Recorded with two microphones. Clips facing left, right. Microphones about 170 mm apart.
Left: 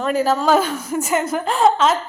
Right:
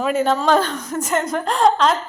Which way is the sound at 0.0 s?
Centre (ahead or behind).